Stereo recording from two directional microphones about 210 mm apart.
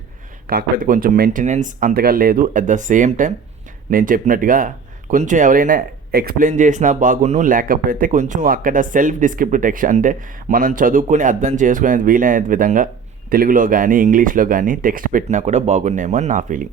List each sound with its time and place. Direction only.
0.4 s speech: 40° right (ahead or behind)